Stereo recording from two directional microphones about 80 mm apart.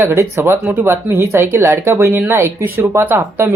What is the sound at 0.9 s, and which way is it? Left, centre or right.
Speech, right.